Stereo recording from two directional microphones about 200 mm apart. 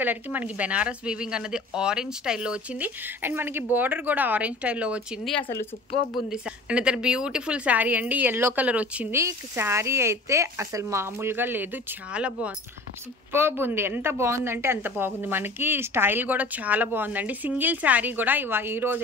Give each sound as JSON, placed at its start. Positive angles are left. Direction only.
{"t": 0.0, "sound": "a woman's voice", "side_deg": -10}